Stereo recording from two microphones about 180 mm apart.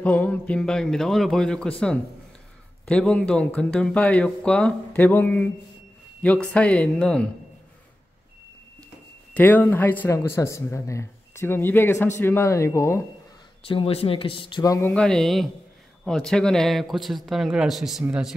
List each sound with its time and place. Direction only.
0.0 s speech: 10° left (ahead or behind)
9.3 s speech: 10° left (ahead or behind)
13.7 s speech: 30° left (ahead or behind); by 18.3 s 5° right (ahead or behind)